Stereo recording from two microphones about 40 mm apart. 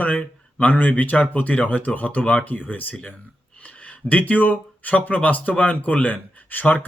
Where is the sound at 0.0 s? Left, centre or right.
Left.